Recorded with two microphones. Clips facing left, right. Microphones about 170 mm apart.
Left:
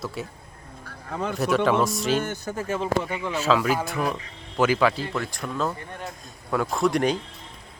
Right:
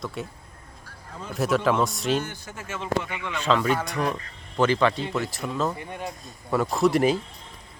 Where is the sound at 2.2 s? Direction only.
45° left (ahead or behind).